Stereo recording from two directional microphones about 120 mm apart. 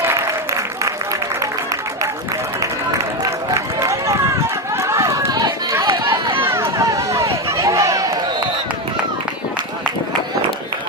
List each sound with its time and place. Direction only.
3.8 s run: 25° right (ahead or behind)
6.1 s run: 45° right (ahead or behind)
6.4 s run: 20° right (ahead or behind)